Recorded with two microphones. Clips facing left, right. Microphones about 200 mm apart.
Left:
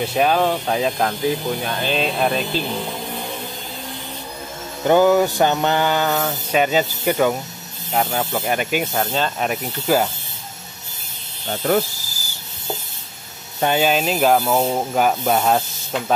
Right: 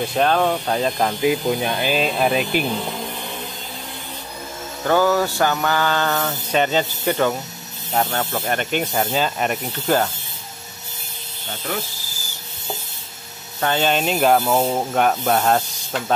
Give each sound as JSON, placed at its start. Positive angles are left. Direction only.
{"t": 0.0, "sound": "speech", "side_deg": 5}
{"t": 1.2, "sound": "speech", "side_deg": -15}
{"t": 4.8, "sound": "mantra", "side_deg": 20}
{"t": 9.0, "sound": "speech", "side_deg": -5}
{"t": 13.6, "sound": "speech", "side_deg": 10}